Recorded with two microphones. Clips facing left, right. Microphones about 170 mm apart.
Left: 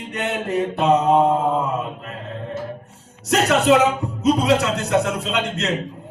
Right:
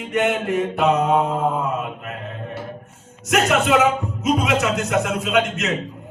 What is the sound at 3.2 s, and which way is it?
Speech, 35° left (ahead or behind).